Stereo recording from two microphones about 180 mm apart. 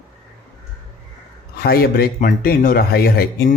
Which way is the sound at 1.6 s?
60° left (ahead or behind).